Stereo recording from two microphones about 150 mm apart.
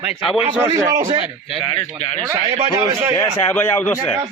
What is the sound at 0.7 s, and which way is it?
Speech, 20° right (ahead or behind).